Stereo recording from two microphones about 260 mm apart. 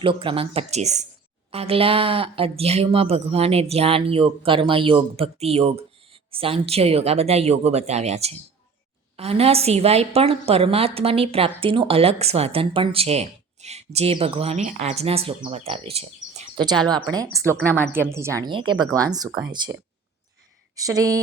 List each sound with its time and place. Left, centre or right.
0.0 s a woman's voice: centre
20.7 s speech: centre